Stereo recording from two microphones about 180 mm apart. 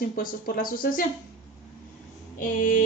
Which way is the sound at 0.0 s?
50° left (ahead or behind).